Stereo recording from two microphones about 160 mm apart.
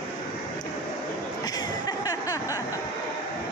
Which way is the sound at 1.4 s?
25° left (ahead or behind).